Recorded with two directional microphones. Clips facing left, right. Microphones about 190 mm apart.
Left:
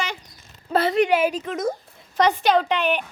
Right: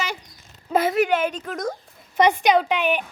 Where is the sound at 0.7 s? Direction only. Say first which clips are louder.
Even; 10° right (ahead or behind).